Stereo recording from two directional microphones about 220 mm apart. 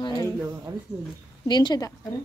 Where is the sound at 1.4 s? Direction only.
20° left (ahead or behind).